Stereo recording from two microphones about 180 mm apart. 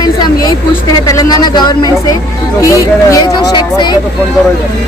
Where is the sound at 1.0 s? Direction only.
20° left (ahead or behind).